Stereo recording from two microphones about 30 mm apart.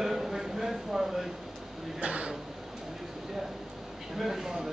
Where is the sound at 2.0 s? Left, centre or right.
Right.